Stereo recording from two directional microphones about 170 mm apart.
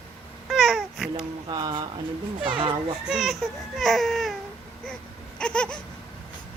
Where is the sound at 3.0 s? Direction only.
5° right (ahead or behind).